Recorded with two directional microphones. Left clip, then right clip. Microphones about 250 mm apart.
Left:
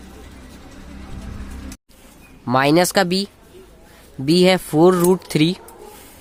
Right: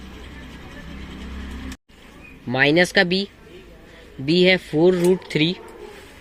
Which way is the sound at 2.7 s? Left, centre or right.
Left.